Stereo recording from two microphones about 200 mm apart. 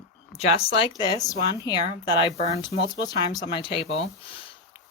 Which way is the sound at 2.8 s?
55° left (ahead or behind).